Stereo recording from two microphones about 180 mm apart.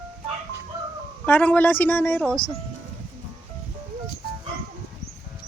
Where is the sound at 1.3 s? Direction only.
10° left (ahead or behind).